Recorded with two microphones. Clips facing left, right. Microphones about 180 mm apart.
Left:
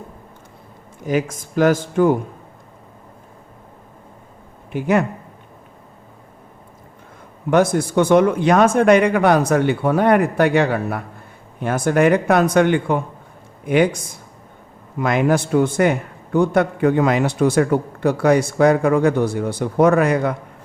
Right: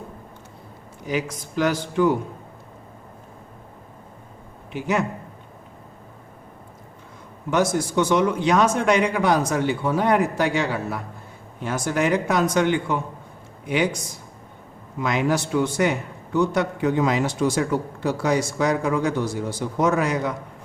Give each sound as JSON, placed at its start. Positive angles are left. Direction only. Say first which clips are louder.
{"t": 1.0, "sound": "speech", "louder": "left 6 dB", "side_deg": 50}
{"t": 4.7, "sound": "speech", "louder": "left 6 dB", "side_deg": 55}
{"t": 7.5, "sound": "a man's voice", "louder": "left 5 dB", "side_deg": 55}